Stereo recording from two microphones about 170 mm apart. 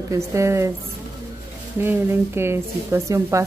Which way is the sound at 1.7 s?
10° right (ahead or behind).